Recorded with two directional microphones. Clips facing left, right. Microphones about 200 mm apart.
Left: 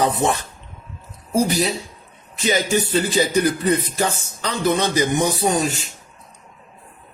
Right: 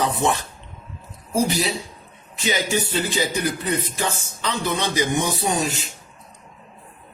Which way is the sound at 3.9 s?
40° left (ahead or behind).